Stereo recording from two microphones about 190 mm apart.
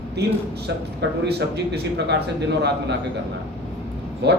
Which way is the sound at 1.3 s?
60° right (ahead or behind).